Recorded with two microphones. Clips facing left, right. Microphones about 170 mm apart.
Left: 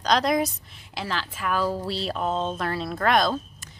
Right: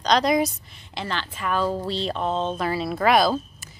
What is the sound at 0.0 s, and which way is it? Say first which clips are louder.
A woman's voice: right 2 dB; centre (ahead or behind).